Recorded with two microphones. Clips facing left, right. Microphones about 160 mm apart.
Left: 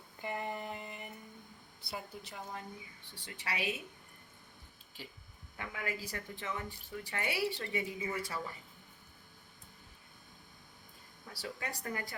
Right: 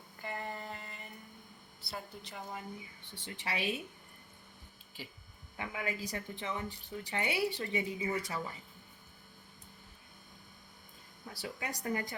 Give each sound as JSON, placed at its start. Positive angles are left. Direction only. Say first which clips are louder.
{"t": 0.2, "sound": "a sound", "louder": "left 2 dB", "side_deg": 15}
{"t": 1.8, "sound": "a woman's voice", "louder": "left 1 dB", "side_deg": 15}
{"t": 3.2, "sound": "a woman's voice", "louder": "right 2 dB", "side_deg": -25}
{"t": 5.5, "sound": "a woman's voice", "louder": "right 2 dB", "side_deg": -20}
{"t": 11.3, "sound": "speech", "louder": "right 1 dB", "side_deg": -15}